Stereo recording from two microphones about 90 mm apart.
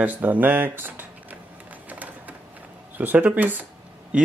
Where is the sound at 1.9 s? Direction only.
20° right (ahead or behind).